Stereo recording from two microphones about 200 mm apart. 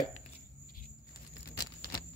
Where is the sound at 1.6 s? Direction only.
50° left (ahead or behind).